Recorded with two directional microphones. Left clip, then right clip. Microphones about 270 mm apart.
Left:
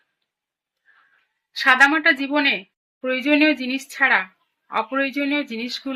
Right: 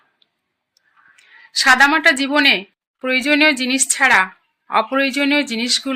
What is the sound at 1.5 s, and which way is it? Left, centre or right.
A woman's voice, right.